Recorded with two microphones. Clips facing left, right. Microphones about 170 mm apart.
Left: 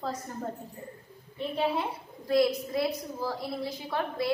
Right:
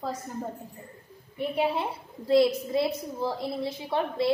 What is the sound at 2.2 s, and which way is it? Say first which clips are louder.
A woman's voice: right 3 dB; 25° right (ahead or behind).